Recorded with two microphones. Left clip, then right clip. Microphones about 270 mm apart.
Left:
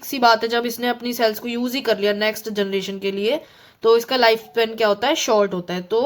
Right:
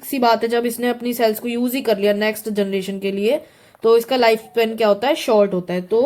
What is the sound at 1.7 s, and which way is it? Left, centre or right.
Speech, left.